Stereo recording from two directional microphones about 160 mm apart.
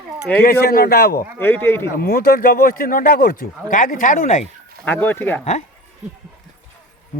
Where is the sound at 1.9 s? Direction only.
75° left (ahead or behind); by 4.5 s 50° left (ahead or behind).